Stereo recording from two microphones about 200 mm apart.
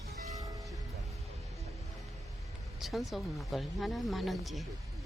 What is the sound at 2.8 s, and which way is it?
Speech, centre (ahead or behind).